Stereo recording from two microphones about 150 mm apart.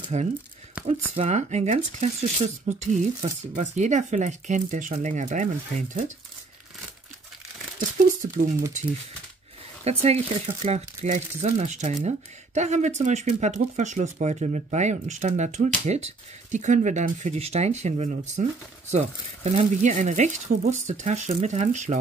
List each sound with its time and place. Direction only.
0.1 s speech: 50° right (ahead or behind)
8.2 s speech: 45° right (ahead or behind)
9.8 s speech: 45° right (ahead or behind)